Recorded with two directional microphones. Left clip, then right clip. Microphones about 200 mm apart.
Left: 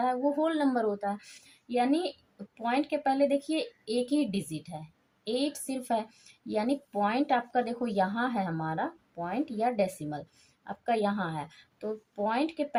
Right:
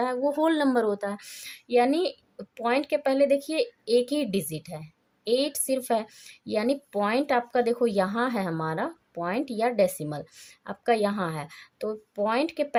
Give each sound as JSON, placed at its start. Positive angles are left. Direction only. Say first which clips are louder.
{"t": 0.0, "sound": "speech", "louder": "right 3 dB", "side_deg": -60}